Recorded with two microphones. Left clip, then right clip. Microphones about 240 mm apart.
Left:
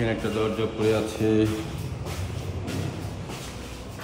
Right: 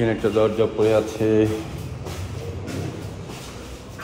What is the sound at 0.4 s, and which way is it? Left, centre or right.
Speech, centre.